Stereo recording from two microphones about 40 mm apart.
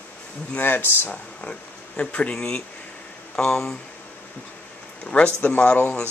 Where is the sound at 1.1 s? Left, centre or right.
Left.